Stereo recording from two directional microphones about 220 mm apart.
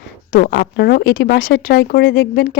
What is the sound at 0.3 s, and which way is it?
Speech, 45° left (ahead or behind).